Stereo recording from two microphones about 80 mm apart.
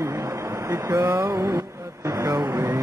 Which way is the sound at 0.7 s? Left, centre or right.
Right.